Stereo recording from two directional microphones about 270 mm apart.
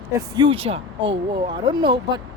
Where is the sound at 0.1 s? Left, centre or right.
Centre.